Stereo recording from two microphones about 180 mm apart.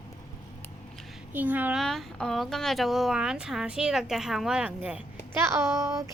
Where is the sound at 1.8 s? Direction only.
Centre (ahead or behind); by 6.1 s 20° right (ahead or behind).